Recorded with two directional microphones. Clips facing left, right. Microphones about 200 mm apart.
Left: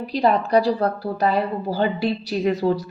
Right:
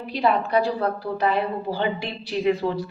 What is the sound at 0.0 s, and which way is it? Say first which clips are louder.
A woman's voice: left 3 dB; 40° left (ahead or behind).